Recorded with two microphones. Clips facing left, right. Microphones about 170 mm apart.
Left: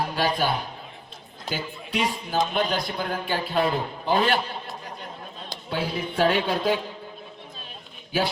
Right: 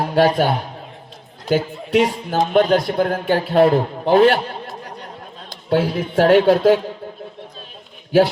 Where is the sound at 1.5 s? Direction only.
60° right (ahead or behind).